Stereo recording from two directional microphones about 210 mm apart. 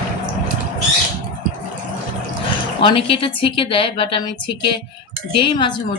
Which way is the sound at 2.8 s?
25° left (ahead or behind).